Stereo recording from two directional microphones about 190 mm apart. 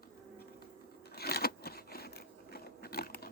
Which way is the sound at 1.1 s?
55° left (ahead or behind).